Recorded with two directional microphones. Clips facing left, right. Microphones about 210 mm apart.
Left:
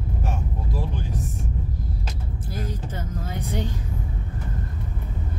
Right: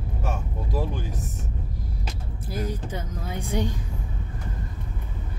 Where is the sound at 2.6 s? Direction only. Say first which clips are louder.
Right 3 dB; 10° right (ahead or behind).